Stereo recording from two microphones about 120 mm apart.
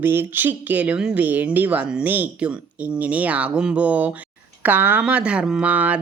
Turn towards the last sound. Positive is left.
turn(degrees=-10)  # may be behind; listen again after turning